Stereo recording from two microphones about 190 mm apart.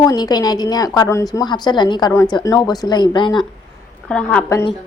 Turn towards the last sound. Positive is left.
turn(degrees=10)  # may be behind; listen again after turning